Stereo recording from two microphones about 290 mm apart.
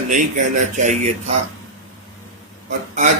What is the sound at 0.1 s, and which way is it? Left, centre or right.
Speech, right.